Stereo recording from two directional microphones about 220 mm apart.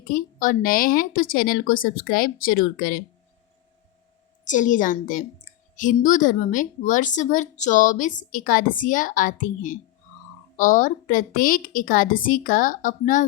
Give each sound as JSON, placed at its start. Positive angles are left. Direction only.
{"t": 0.1, "sound": "a woman's voice", "side_deg": 40}
{"t": 4.4, "sound": "a woman's voice", "side_deg": 35}